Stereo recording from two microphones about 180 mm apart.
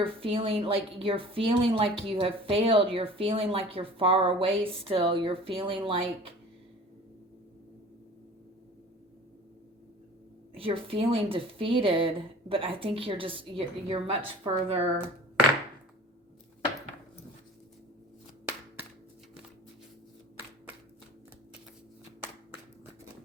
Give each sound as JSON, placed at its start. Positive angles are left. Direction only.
{"t": 0.0, "sound": "speech", "side_deg": -30}
{"t": 10.6, "sound": "a woman's voice", "side_deg": -30}